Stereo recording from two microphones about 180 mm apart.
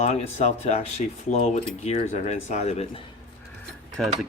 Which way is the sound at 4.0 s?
Centre (ahead or behind).